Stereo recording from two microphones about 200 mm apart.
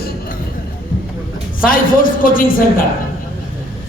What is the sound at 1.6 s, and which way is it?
Speech, 45° left (ahead or behind).